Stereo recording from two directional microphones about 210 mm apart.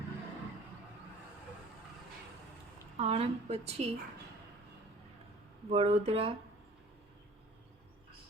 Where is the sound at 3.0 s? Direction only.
30° right (ahead or behind).